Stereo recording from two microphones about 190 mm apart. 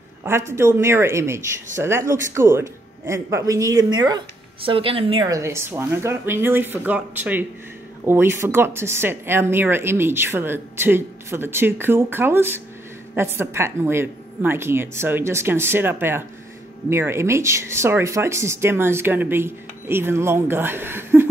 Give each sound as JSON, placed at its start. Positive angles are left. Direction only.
{"t": 0.2, "sound": "speech", "side_deg": -15}
{"t": 5.3, "sound": "speech", "side_deg": -15}